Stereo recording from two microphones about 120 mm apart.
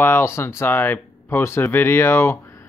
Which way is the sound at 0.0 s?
20° left (ahead or behind).